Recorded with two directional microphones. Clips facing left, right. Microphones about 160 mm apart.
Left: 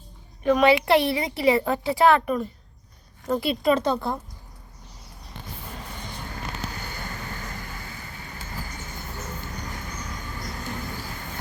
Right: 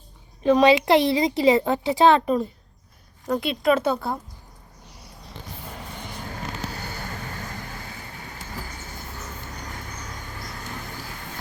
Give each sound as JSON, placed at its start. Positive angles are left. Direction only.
{"t": 0.4, "sound": "a woman's voice", "side_deg": -20}
{"t": 3.2, "sound": "a woman's voice", "side_deg": 0}